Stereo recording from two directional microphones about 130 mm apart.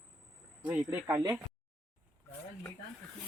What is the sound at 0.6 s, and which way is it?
Speech, 10° right (ahead or behind).